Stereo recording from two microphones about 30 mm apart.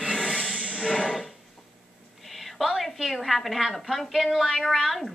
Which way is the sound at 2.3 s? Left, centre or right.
Centre.